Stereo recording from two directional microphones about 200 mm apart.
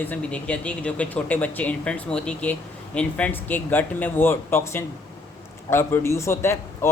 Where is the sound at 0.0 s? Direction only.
5° left (ahead or behind).